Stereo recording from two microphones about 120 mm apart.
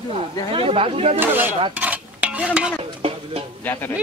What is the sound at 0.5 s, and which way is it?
Speech, 50° right (ahead or behind).